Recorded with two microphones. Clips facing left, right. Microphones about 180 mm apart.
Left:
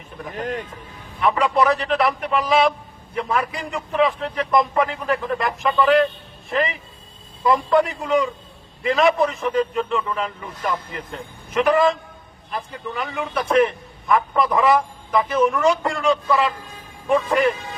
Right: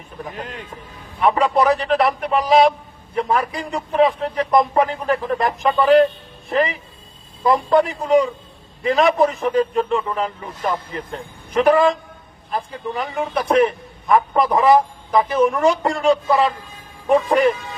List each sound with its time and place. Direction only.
0.3 s speech: 45° left (ahead or behind)
1.2 s a man's voice: 35° right (ahead or behind)